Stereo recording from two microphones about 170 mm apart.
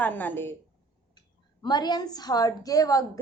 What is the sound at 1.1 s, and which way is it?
A woman's voice, 25° left (ahead or behind).